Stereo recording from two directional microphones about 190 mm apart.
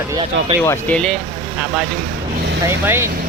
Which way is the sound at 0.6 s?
10° left (ahead or behind).